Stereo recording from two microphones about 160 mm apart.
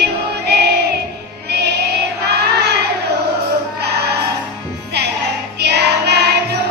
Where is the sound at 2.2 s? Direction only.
90° right.